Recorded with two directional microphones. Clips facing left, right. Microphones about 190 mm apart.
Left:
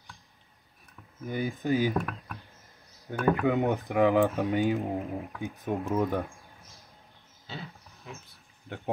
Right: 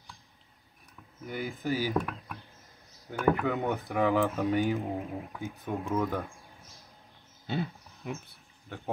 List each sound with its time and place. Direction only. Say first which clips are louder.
1.2 s speech: left 3 dB; 15° left (ahead or behind)
3.1 s speech: left 2 dB; 20° left (ahead or behind)
7.4 s a sound: right 9 dB; 55° right (ahead or behind)
8.6 s speech: left 3 dB; 15° left (ahead or behind)